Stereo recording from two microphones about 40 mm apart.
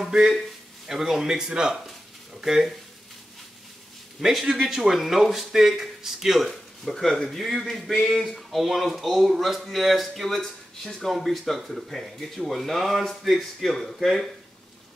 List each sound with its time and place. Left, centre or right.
0.3 s speech: centre
2.4 s speech: centre
4.2 s speech: centre
11.1 s speech: centre